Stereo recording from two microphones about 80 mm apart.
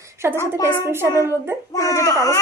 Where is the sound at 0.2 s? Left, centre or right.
Right.